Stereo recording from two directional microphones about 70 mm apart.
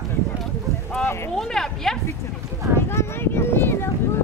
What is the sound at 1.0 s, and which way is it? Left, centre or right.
Clip-clop, left.